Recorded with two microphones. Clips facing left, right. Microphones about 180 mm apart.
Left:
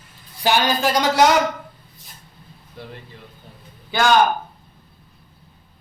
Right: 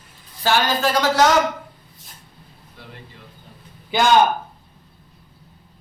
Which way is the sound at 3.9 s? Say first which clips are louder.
Right 1 dB; 20° right (ahead or behind).